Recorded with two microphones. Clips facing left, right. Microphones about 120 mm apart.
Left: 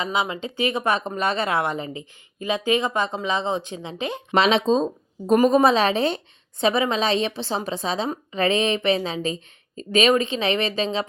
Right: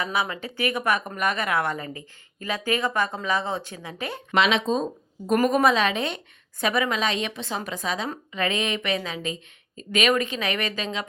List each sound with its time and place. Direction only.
0.0 s speech: 20° left (ahead or behind)
4.4 s a woman's voice: 35° left (ahead or behind)